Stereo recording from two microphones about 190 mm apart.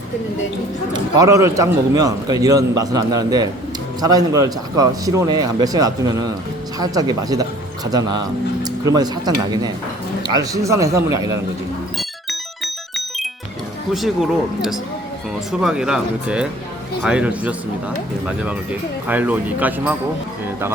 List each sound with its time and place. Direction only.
0.9 s a man's voice: 20° right (ahead or behind)
11.9 s music: centre (ahead or behind)
13.9 s speech: centre (ahead or behind)
19.0 s a man's voice: 10° right (ahead or behind)